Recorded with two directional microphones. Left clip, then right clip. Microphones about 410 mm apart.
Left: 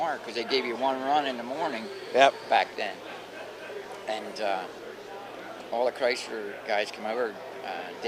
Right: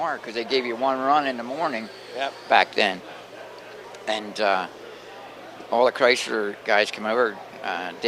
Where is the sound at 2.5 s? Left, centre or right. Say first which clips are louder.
Right 7 dB; right.